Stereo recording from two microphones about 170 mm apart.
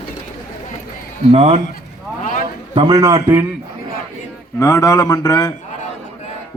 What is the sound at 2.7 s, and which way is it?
Speech, 25° right (ahead or behind).